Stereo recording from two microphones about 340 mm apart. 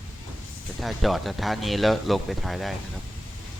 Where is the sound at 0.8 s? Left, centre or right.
Centre.